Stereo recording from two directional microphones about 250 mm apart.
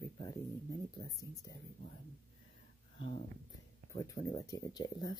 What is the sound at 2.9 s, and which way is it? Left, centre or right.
Speech, left.